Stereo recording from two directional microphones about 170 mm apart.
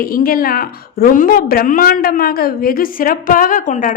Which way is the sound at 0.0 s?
60° left (ahead or behind).